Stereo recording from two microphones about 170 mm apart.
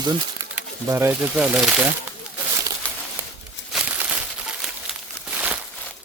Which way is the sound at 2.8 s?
10° left (ahead or behind).